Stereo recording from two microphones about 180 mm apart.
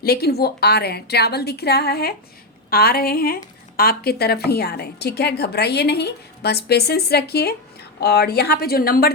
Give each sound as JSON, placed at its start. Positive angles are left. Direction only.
{"t": 0.0, "sound": "speech", "side_deg": 60}